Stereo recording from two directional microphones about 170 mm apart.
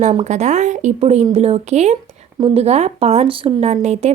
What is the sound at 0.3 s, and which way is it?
A woman's voice, 40° right (ahead or behind).